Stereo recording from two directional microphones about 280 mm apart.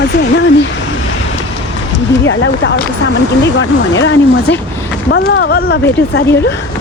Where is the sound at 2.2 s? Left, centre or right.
Left.